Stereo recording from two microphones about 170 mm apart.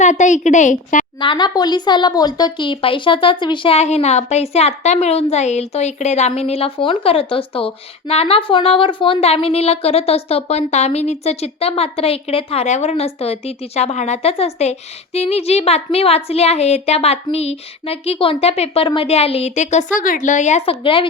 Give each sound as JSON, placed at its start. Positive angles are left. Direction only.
{"t": 0.0, "sound": "a woman's voice", "side_deg": 45}
{"t": 1.2, "sound": "speech", "side_deg": 25}